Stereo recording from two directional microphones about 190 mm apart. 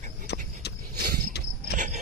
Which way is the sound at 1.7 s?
40° right (ahead or behind).